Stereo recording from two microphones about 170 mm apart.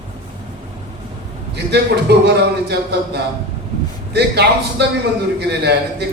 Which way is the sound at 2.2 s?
75° right (ahead or behind).